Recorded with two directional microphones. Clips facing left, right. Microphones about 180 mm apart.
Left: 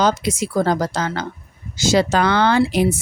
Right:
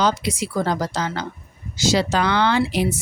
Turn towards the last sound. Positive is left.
turn(degrees=50)  # may be behind; listen again after turning